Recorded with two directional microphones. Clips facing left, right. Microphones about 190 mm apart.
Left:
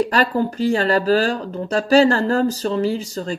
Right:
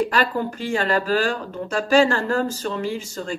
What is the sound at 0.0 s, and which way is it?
Speech, 40° left (ahead or behind).